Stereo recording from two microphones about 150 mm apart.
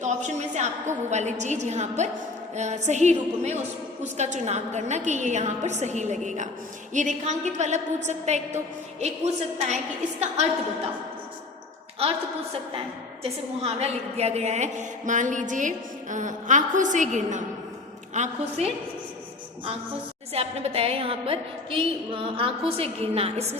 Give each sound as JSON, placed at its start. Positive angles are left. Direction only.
{"t": 0.0, "sound": "a woman's voice", "side_deg": -50}
{"t": 12.0, "sound": "a woman's voice", "side_deg": -40}
{"t": 13.2, "sound": "a woman's voice", "side_deg": -45}
{"t": 20.3, "sound": "a woman's voice", "side_deg": -40}